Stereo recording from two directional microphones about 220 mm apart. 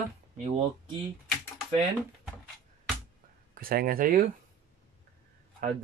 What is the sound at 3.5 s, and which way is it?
Speech, 40° right (ahead or behind).